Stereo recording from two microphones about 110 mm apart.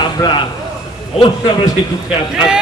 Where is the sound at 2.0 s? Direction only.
5° right (ahead or behind).